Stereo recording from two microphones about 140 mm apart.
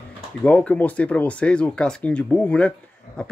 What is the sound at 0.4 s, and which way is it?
Speech, 10° left (ahead or behind).